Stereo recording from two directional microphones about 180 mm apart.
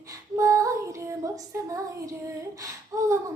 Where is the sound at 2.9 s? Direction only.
15° right (ahead or behind).